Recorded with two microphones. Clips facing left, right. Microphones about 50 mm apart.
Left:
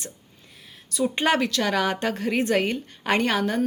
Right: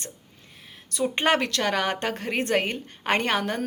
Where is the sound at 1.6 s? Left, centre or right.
Right.